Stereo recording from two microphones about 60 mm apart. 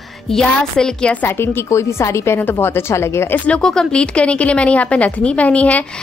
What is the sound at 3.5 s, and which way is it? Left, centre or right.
A woman's voice, centre.